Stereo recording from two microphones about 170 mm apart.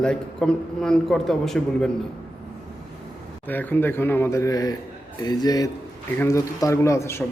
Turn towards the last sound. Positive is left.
turn(degrees=15)  # may be behind; listen again after turning